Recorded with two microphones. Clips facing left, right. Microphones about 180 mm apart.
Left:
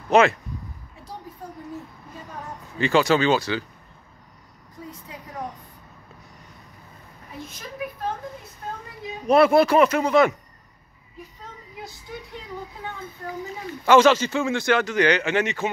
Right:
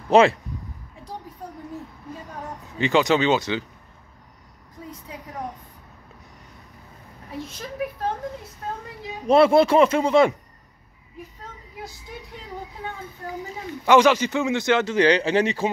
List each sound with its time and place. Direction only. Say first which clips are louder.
0.1 s speech: right 2 dB; 30° right (ahead or behind)
2.8 s speech: even; 20° right (ahead or behind)
9.3 s speech: right 1 dB; 25° right (ahead or behind)
13.8 s speech: left 1 dB; 15° right (ahead or behind); by 15.7 s 35° right (ahead or behind)